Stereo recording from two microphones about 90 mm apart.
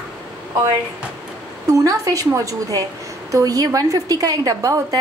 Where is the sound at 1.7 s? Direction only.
40° right (ahead or behind).